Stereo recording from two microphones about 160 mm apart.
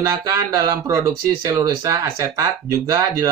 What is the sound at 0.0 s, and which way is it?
Speech, 20° right (ahead or behind).